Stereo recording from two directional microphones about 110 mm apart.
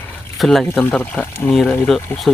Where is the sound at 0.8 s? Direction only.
15° left (ahead or behind).